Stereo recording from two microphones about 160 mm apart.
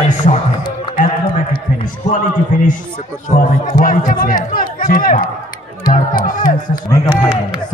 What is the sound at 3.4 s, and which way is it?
Speech, 55° left (ahead or behind).